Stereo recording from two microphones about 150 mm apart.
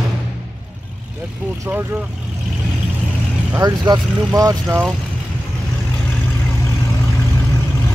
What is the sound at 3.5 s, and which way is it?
Speech, 25° right (ahead or behind).